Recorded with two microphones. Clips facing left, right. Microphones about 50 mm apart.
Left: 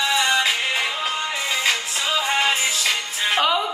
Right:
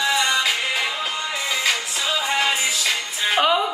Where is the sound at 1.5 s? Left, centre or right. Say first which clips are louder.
Even; left.